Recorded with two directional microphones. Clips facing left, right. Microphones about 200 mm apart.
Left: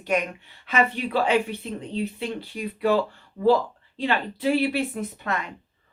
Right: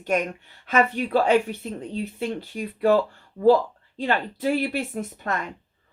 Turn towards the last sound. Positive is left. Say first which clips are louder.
# even
turn(degrees=-45)  # may be behind; listen again after turning